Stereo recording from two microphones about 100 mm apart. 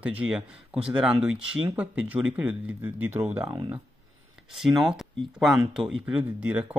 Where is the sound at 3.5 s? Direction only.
45° right (ahead or behind).